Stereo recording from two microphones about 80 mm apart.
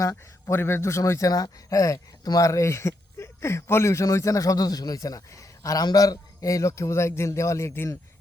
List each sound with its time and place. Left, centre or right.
0.0 s speech: left
1.3 s speech: left